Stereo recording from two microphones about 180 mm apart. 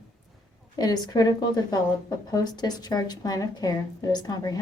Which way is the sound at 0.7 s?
20° left (ahead or behind).